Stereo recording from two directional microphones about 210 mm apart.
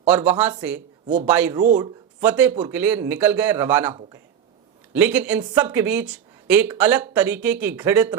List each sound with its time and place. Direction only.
0.0 s speech: 10° right (ahead or behind)
4.9 s speech: 10° right (ahead or behind)